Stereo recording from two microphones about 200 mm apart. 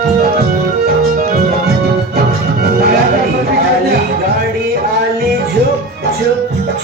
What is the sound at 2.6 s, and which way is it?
Music, 50° right (ahead or behind).